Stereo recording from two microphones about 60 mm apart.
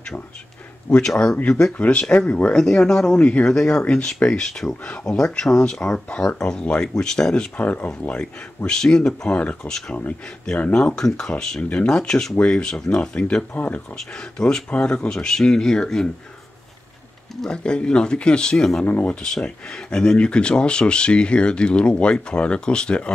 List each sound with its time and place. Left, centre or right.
0.9 s speech: left
2.5 s speech: centre
3.2 s speech: left
7.5 s speech: left
8.6 s speech: centre
17.5 s speech: centre